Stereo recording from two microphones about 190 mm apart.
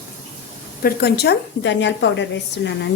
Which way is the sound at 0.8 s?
55° left (ahead or behind).